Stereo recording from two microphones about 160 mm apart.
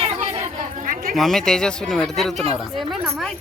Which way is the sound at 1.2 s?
Centre (ahead or behind).